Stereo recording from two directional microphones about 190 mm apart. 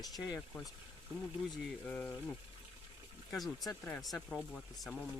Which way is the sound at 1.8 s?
10° left (ahead or behind).